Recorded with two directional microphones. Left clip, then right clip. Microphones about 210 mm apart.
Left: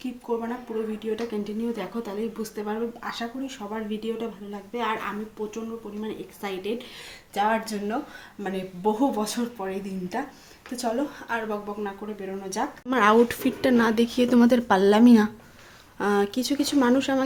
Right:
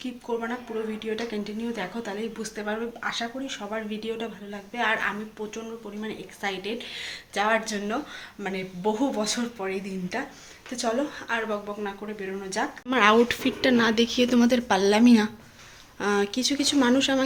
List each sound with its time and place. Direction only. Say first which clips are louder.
0.0 s a woman's voice: left 1 dB; centre (ahead or behind)
12.9 s speech: even; 15° left (ahead or behind)